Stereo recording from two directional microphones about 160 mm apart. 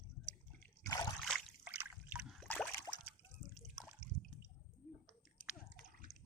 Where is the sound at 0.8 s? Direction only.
20° left (ahead or behind).